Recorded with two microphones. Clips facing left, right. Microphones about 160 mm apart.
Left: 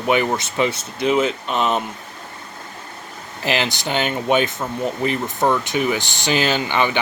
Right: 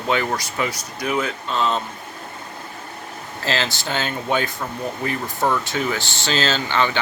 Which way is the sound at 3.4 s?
15° left (ahead or behind).